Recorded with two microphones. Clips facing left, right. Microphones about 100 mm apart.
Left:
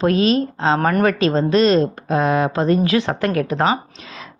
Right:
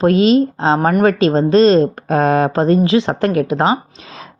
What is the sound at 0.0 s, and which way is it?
Speech, 30° right (ahead or behind).